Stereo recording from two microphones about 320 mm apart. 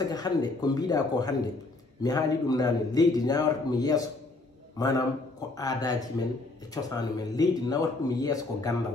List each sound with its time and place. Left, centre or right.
0.0 s a man's voice: centre